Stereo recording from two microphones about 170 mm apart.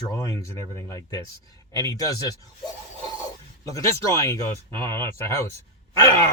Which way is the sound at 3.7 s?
15° left (ahead or behind).